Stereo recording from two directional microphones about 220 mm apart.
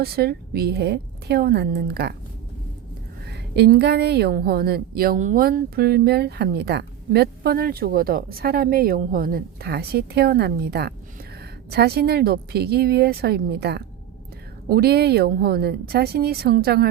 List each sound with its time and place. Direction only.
0.0 s a woman's voice: 45° right (ahead or behind)
3.2 s a woman's voice: 50° right (ahead or behind)